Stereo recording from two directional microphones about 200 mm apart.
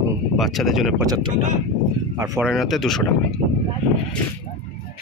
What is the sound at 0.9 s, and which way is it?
Speech, 20° right (ahead or behind).